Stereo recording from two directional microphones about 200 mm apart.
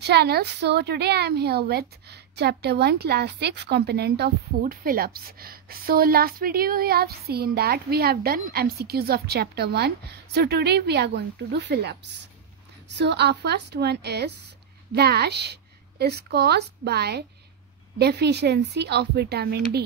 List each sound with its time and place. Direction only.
0.0 s a woman's voice: 55° right (ahead or behind)